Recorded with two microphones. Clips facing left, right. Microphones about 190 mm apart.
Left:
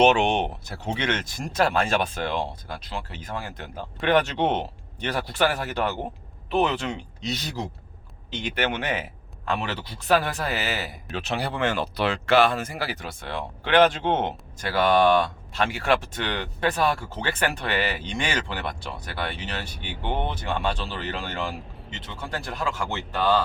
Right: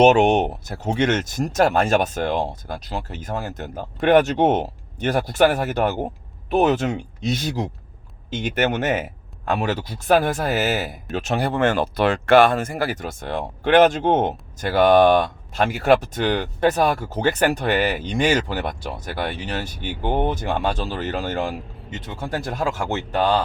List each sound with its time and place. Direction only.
0.0 s speech: 45° right (ahead or behind)